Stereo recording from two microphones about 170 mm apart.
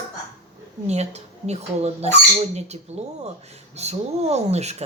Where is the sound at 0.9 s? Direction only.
40° right (ahead or behind).